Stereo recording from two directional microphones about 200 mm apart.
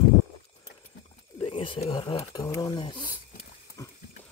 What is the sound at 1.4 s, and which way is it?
Wild animals, 25° left (ahead or behind).